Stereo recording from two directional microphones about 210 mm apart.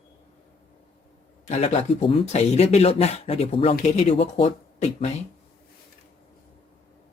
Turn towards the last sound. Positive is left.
turn(degrees=30)  # may be behind; listen again after turning